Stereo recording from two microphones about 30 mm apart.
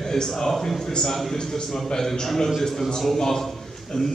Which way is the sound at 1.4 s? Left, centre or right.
Left.